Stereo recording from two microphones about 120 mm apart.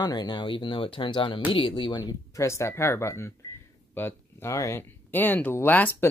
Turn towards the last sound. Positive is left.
turn(degrees=15)  # may be behind; listen again after turning